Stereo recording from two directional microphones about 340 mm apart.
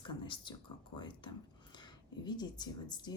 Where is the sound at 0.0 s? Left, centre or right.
Centre.